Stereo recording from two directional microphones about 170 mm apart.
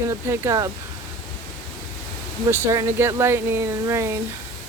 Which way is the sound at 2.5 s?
15° right (ahead or behind).